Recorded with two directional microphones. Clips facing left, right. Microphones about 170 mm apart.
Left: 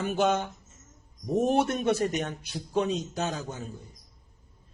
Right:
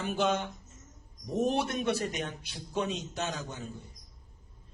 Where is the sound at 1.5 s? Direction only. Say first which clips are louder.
Left 5 dB; 45° left (ahead or behind).